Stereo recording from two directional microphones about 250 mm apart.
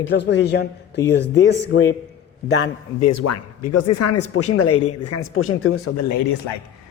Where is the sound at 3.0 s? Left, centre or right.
Left.